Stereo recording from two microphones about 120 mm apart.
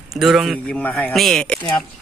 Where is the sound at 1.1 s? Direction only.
Centre (ahead or behind).